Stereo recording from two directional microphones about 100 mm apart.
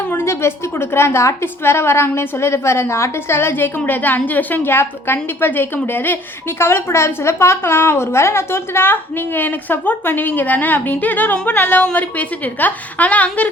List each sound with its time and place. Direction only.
0.1 s a woman's voice: 25° left (ahead or behind)